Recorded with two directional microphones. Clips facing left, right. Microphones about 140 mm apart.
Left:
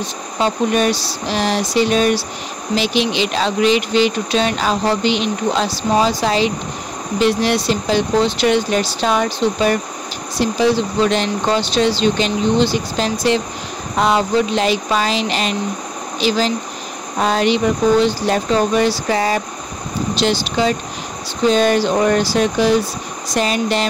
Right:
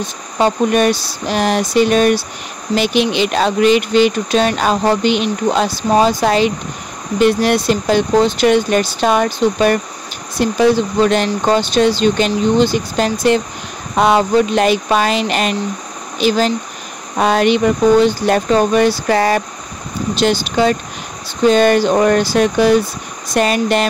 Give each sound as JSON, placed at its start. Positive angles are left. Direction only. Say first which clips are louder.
{"t": 0.4, "sound": "speech", "louder": "right 3 dB", "side_deg": -50}